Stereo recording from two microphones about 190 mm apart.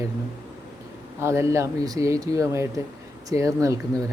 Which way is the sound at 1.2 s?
15° right (ahead or behind).